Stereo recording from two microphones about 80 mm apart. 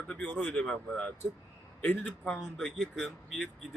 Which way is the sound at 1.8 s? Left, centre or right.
Centre.